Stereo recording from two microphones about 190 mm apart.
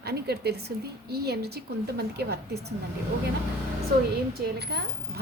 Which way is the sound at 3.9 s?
55° right (ahead or behind).